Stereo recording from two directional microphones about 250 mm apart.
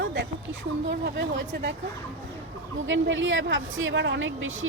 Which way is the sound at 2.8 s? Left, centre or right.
Right.